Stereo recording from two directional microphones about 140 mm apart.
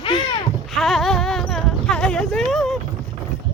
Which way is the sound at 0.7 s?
Centre (ahead or behind).